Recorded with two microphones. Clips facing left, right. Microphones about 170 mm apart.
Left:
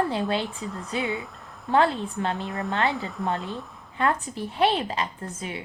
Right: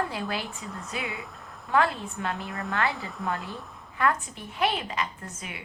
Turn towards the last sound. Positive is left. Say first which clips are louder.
# left 6 dB
turn(degrees=30)  # may be behind; listen again after turning